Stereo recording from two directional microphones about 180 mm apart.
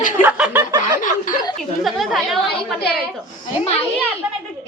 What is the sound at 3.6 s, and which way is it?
Speech, 35° left (ahead or behind).